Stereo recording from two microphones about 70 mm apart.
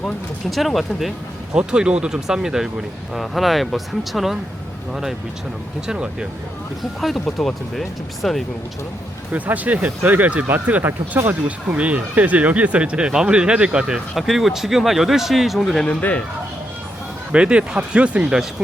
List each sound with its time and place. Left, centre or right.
0.5 s speech: centre
1.5 s speech: centre
5.9 s speech: centre
7.0 s speech: centre
9.3 s speech: right; by 15.8 s centre
15.8 s speech: left
17.3 s speech: centre